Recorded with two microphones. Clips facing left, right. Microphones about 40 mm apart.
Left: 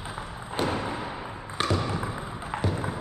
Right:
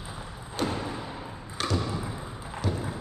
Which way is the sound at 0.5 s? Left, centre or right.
Left.